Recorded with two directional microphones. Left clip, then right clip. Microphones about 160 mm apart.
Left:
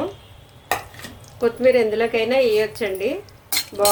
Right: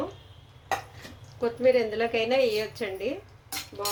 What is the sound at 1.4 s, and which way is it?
A woman's voice, 15° left (ahead or behind).